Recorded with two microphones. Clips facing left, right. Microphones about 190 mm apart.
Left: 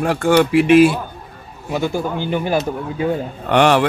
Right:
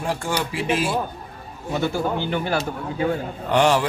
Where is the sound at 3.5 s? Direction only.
65° left (ahead or behind).